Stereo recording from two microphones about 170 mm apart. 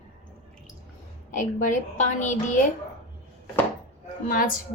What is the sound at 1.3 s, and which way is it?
Speech, 50° left (ahead or behind).